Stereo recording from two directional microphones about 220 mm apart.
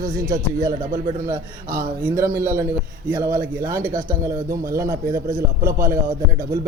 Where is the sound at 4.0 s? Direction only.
15° right (ahead or behind).